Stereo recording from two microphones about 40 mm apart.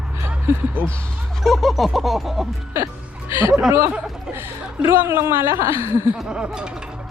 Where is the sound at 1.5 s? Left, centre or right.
Centre.